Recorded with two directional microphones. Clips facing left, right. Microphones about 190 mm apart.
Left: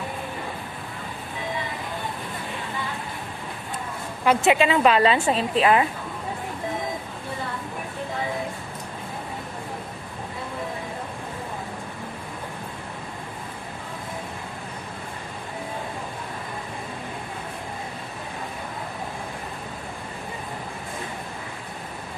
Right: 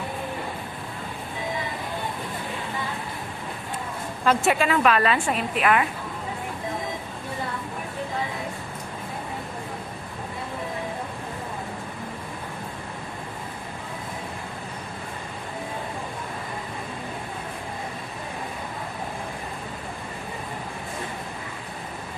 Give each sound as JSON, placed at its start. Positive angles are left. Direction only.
{"t": 4.2, "sound": "a woman's voice", "side_deg": 15}